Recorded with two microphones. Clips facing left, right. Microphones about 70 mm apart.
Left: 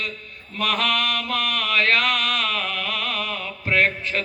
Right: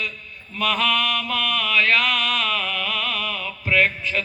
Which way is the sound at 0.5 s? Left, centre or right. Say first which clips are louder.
Right 1 dB; left.